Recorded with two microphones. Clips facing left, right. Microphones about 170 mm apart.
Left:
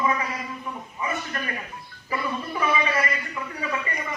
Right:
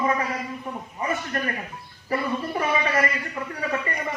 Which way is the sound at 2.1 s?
50° right (ahead or behind).